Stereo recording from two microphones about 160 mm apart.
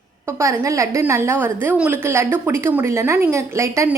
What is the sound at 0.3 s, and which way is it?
A woman's voice, 20° right (ahead or behind).